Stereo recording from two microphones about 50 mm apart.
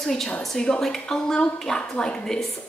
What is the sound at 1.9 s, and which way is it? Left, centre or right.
Speech, left.